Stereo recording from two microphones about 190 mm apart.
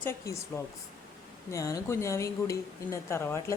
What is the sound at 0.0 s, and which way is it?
Speech, 10° left (ahead or behind).